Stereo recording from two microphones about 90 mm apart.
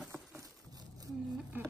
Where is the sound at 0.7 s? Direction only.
45° right (ahead or behind).